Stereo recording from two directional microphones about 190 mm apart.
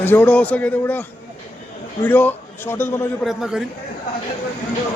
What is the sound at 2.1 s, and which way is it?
Speech, 10° left (ahead or behind).